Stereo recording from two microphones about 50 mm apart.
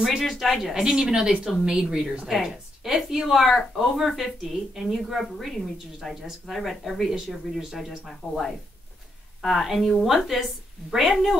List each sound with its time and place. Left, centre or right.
0.2 s speech: centre
0.8 s speech: centre
2.2 s speech: centre
8.2 s speech: left
9.4 s speech: centre